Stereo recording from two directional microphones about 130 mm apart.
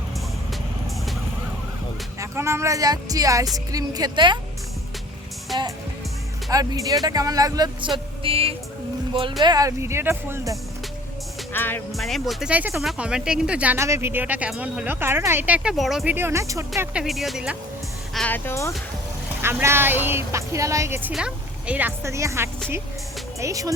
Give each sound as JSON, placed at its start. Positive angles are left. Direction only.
{"t": 2.1, "sound": "speech", "side_deg": -20}
{"t": 6.5, "sound": "speech", "side_deg": -25}
{"t": 9.4, "sound": "speech", "side_deg": -30}
{"t": 11.5, "sound": "speech", "side_deg": 15}
{"t": 11.9, "sound": "speech", "side_deg": 0}
{"t": 13.7, "sound": "speech", "side_deg": -20}
{"t": 15.7, "sound": "speech", "side_deg": 0}
{"t": 16.0, "sound": "speech", "side_deg": -20}
{"t": 16.9, "sound": "speech", "side_deg": -5}
{"t": 18.3, "sound": "speech", "side_deg": 15}
{"t": 19.4, "sound": "speech", "side_deg": -20}
{"t": 21.1, "sound": "speech", "side_deg": -5}